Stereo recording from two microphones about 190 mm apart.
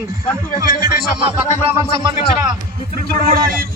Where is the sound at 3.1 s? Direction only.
50° right (ahead or behind).